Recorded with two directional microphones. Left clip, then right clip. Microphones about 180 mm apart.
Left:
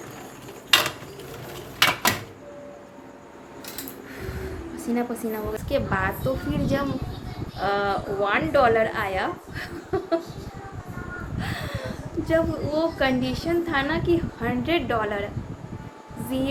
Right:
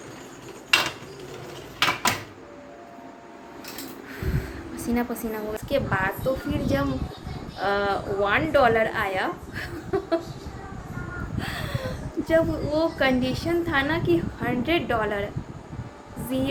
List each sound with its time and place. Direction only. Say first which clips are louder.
1.8 s a sound: left 2 dB; 45° left (ahead or behind)
4.8 s a woman's voice: even; 10° right (ahead or behind)
11.3 s a woman's voice: right 1 dB; 10° right (ahead or behind)